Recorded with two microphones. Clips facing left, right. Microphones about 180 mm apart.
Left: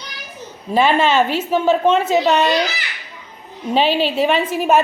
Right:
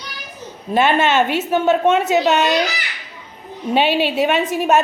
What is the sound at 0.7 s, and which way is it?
A woman's voice, centre (ahead or behind).